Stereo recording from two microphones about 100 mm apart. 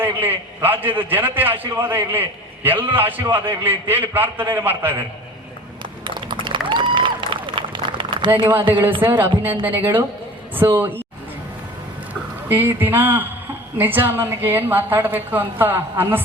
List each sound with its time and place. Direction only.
0.0 s a woman's voice: 20° right (ahead or behind)
6.1 s applause: 55° right (ahead or behind)
9.0 s a woman's voice: 20° right (ahead or behind)
12.5 s a woman's voice: 20° right (ahead or behind)